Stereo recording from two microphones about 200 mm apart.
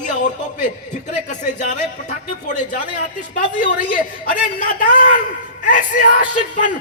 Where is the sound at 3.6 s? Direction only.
45° left (ahead or behind).